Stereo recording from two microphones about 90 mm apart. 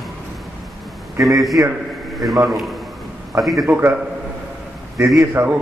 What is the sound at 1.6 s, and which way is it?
Speech, 25° right (ahead or behind).